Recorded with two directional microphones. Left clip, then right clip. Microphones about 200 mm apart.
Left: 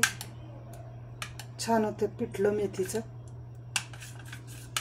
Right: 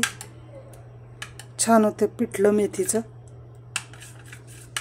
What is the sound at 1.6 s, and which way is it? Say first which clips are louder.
Speech: right 9 dB; 55° right (ahead or behind).